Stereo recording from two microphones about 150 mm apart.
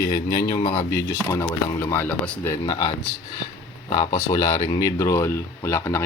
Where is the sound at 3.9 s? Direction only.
35° left (ahead or behind).